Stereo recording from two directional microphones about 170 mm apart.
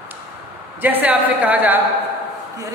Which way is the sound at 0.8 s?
10° right (ahead or behind).